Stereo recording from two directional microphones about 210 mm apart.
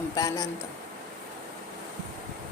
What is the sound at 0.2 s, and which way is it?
Speech, 15° left (ahead or behind).